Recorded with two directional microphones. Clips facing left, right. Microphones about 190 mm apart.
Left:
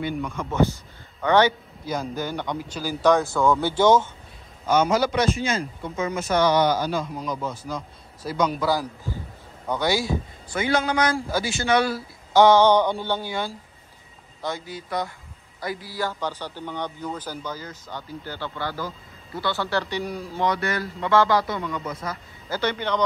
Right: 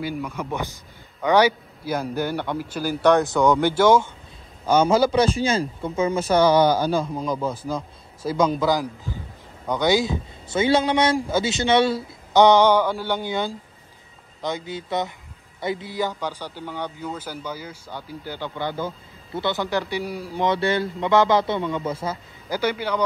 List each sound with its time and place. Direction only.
0.0 s a man's voice: 5° right (ahead or behind)
3.3 s a man's voice: 20° right (ahead or behind)
4.6 s a man's voice: 30° right (ahead or behind); by 20.4 s 10° right (ahead or behind)
20.4 s speech: 25° right (ahead or behind)
22.5 s a man's voice: 10° right (ahead or behind)